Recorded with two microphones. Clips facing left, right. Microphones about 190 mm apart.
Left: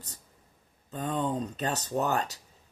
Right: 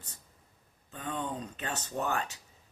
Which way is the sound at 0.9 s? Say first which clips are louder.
Left 6 dB; 35° left (ahead or behind).